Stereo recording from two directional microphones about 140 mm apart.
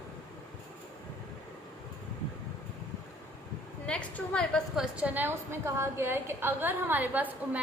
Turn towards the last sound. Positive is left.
turn(degrees=-10)  # may be behind; listen again after turning